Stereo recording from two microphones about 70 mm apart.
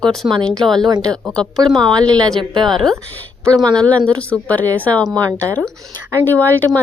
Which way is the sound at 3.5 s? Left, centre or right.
Right.